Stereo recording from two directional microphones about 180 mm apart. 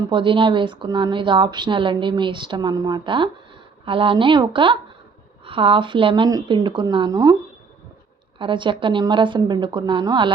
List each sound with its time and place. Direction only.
0.1 s speech: 30° right (ahead or behind)
8.4 s speech: 25° right (ahead or behind)